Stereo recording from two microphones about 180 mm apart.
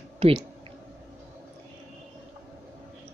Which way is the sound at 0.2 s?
30° right (ahead or behind).